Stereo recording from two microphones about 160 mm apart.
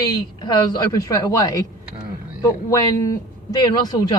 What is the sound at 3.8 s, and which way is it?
Speech, 25° left (ahead or behind).